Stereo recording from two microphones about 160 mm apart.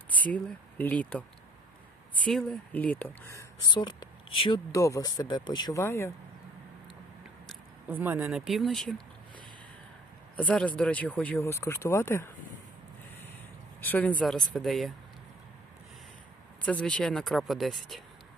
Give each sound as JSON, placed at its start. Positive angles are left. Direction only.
{"t": 0.1, "sound": "a sound", "side_deg": 10}
{"t": 0.8, "sound": "speech", "side_deg": 10}
{"t": 3.7, "sound": "speech", "side_deg": 30}
{"t": 7.9, "sound": "speech", "side_deg": -10}
{"t": 10.3, "sound": "speech", "side_deg": 5}
{"t": 13.8, "sound": "speech", "side_deg": 10}
{"t": 16.6, "sound": "speech", "side_deg": 10}